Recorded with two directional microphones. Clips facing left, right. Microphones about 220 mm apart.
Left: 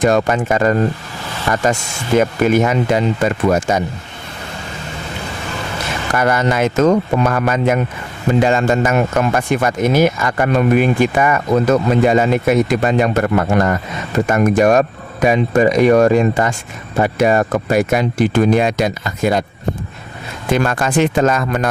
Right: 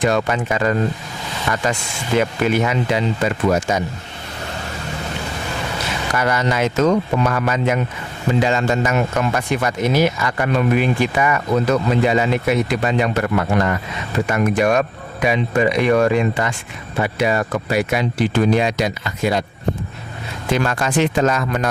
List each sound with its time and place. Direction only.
0.0 s speech: 45° left (ahead or behind)
6.1 s speech: 50° left (ahead or behind)
20.5 s speech: 50° left (ahead or behind)